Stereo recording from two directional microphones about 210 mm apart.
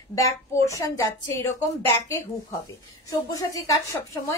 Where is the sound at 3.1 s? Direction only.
15° left (ahead or behind).